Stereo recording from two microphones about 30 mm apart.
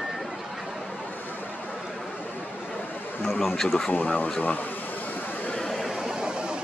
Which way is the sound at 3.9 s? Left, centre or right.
Left.